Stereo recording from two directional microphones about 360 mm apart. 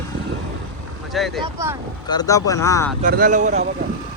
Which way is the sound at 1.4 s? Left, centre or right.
Centre.